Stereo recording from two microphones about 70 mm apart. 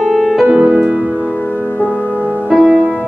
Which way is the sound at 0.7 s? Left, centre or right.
Centre.